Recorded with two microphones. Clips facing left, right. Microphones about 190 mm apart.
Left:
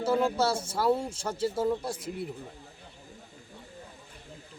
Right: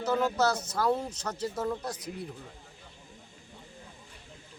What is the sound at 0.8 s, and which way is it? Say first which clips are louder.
Speech: left 2 dB; 5° left (ahead or behind).